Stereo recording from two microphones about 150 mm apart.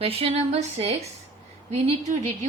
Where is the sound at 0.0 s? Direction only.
40° right (ahead or behind).